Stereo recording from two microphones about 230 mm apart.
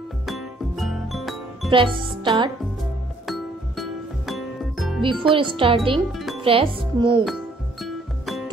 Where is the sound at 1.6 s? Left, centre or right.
Right.